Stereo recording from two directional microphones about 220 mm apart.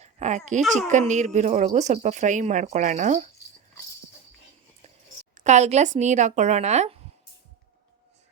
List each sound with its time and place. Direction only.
0.0 s a sound: 30° right (ahead or behind)
0.9 s speech: 35° right (ahead or behind)
5.3 s speech: 35° right (ahead or behind)